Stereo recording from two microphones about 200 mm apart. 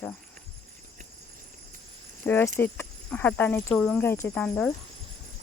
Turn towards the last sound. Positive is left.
turn(degrees=5)  # may be behind; listen again after turning